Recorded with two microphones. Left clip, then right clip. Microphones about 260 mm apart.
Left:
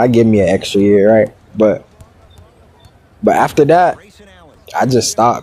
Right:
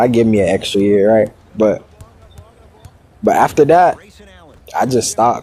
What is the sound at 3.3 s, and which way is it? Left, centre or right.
Speech, left.